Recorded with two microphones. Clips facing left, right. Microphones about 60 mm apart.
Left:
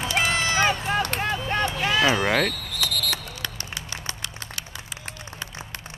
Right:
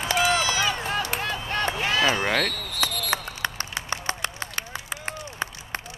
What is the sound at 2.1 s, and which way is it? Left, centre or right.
Speech, centre.